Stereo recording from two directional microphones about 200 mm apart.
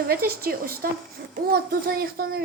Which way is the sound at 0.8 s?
50° right (ahead or behind).